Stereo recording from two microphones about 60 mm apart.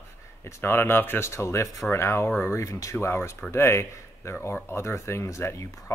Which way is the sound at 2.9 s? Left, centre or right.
Left.